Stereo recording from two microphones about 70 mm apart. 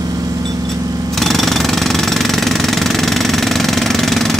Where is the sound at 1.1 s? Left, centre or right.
Centre.